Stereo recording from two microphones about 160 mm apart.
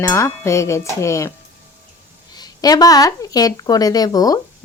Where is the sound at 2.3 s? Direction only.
25° left (ahead or behind).